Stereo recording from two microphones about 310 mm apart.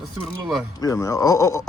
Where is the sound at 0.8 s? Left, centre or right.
Centre.